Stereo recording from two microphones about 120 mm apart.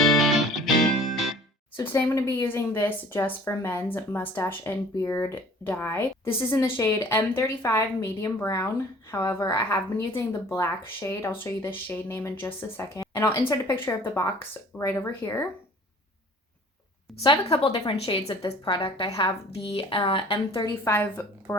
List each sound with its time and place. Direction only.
0.0 s music: centre (ahead or behind)
1.7 s a woman's voice: 20° left (ahead or behind)
17.1 s a woman's voice: centre (ahead or behind)
17.4 s a woman's voice: 55° left (ahead or behind)
18.4 s a woman's voice: 35° left (ahead or behind)
18.8 s speech: 50° left (ahead or behind)
20.9 s a woman's voice: 15° left (ahead or behind)